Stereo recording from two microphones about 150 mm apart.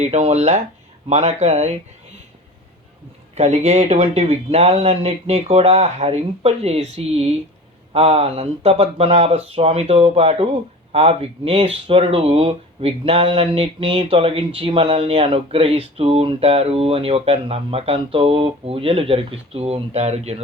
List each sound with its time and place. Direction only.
0.0 s speech: 45° right (ahead or behind)
3.3 s speech: 45° right (ahead or behind)